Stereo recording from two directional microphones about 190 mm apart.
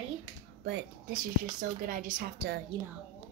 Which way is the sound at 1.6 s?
45° right (ahead or behind).